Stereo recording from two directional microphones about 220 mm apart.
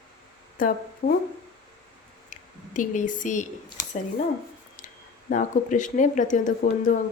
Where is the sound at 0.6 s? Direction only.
35° left (ahead or behind).